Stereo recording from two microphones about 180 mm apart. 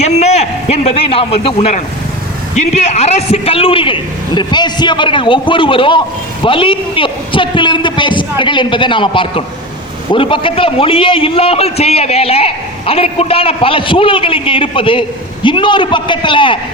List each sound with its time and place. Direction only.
0.0 s a man's voice: 40° left (ahead or behind)